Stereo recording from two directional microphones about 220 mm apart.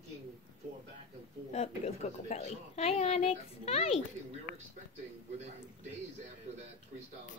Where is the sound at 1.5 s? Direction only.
30° left (ahead or behind).